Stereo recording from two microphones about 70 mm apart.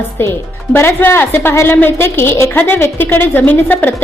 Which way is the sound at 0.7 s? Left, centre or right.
Left.